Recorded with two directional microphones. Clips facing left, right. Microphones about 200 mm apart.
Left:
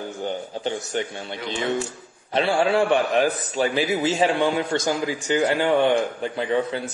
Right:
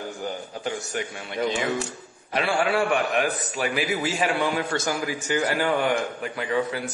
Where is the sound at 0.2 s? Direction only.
30° left (ahead or behind).